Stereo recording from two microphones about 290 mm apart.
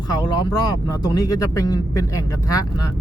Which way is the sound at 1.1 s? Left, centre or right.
Centre.